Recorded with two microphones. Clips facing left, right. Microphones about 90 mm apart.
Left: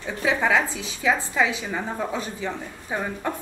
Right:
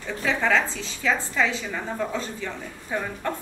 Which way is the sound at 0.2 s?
15° left (ahead or behind).